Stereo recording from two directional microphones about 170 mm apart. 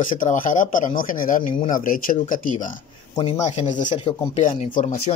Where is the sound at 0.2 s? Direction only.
55° left (ahead or behind).